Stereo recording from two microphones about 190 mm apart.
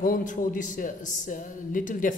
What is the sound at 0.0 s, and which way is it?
Speech, 45° left (ahead or behind).